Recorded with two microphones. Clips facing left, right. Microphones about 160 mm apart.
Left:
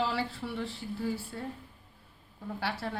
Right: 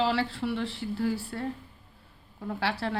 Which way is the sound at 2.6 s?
85° right.